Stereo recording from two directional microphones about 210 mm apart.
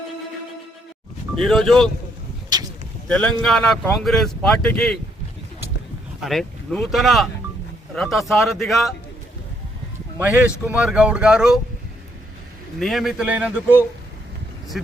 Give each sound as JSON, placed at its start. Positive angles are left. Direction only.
{"t": 1.4, "sound": "speech", "side_deg": 0}
{"t": 3.1, "sound": "speech", "side_deg": 5}
{"t": 6.1, "sound": "speech", "side_deg": 0}
{"t": 10.2, "sound": "speech", "side_deg": -10}
{"t": 12.8, "sound": "speech", "side_deg": 0}